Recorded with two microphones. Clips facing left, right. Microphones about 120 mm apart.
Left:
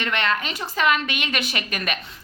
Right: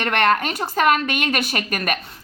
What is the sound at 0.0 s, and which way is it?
A woman's voice, 50° right (ahead or behind).